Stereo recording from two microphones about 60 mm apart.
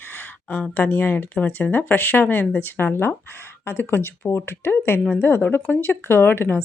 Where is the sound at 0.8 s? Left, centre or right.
Left.